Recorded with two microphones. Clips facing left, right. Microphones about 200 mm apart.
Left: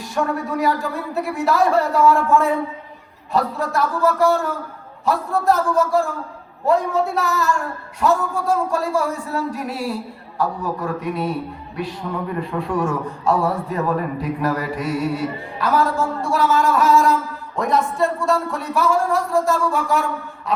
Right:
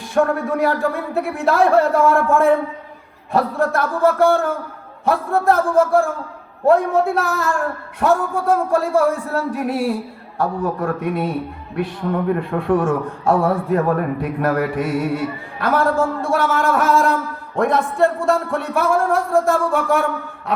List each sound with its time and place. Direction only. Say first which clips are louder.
0.1 s a man's voice: right 5 dB; 55° right (ahead or behind)